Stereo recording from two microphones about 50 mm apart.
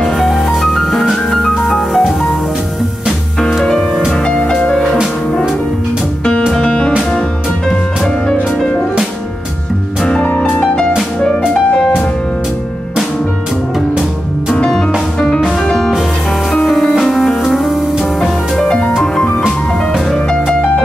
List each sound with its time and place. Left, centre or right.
0.0 s music: centre
3.6 s music: centre
6.5 s music: centre
11.2 s music: centre
15.1 s music: left
15.6 s music: centre
18.6 s music: centre